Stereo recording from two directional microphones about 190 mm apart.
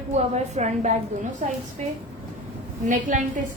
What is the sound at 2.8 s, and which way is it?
Speech, 40° right (ahead or behind).